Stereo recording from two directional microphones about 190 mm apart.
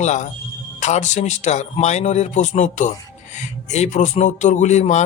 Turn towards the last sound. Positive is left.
turn(degrees=40)  # may be behind; listen again after turning